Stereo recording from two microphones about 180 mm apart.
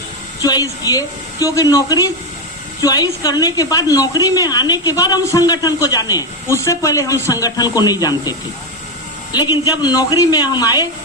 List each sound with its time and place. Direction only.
0.4 s a woman's voice: 20° left (ahead or behind)